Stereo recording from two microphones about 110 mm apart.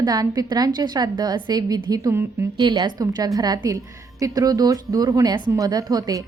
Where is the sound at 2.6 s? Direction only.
45° right (ahead or behind).